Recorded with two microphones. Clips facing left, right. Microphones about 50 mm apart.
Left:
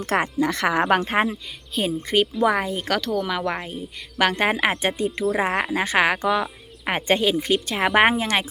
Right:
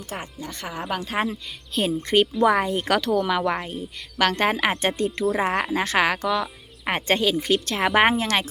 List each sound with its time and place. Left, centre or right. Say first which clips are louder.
0.0 s speech: left 12 dB; left
0.9 s speech: left 8 dB; left
1.3 s speech: even; centre